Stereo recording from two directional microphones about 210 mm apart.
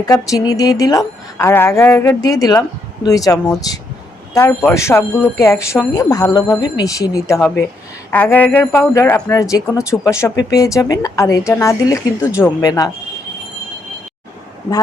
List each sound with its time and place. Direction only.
0.0 s speech: 15° left (ahead or behind)